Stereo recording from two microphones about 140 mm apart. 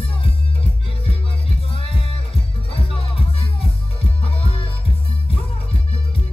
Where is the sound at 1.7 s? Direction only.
40° left (ahead or behind).